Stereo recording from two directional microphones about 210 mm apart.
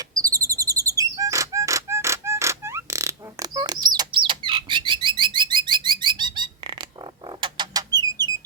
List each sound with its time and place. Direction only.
0.1 s chirp: 15° right (ahead or behind)
7.4 s chicken: 20° right (ahead or behind)